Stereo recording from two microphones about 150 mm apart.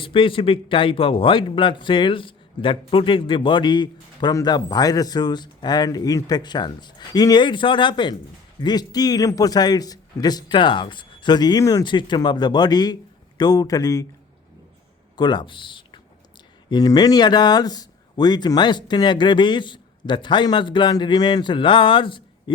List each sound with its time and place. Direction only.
0.0 s a man's voice: 35° left (ahead or behind)
15.1 s a man's voice: 30° left (ahead or behind)